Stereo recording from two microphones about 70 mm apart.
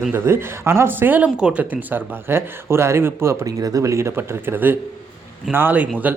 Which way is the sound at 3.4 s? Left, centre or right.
Right.